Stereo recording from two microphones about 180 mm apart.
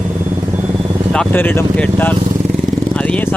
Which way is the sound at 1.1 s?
5° left (ahead or behind).